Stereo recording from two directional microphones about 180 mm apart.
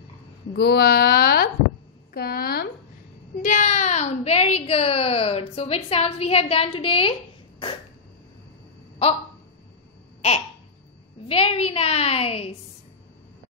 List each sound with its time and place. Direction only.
0.6 s a woman's voice: 60° left (ahead or behind)
3.4 s a woman's voice: 45° left (ahead or behind)
11.2 s a woman's voice: 35° left (ahead or behind)